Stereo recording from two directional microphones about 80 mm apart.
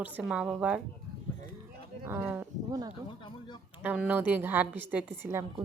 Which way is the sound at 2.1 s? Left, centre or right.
Right.